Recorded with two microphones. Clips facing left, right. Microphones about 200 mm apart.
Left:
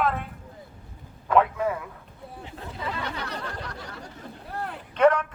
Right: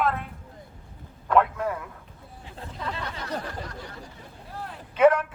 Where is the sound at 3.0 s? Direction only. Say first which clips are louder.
Even; 70° left (ahead or behind).